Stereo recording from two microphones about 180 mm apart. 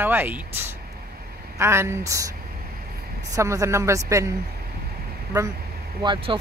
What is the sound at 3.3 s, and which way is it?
Speech, 15° right (ahead or behind).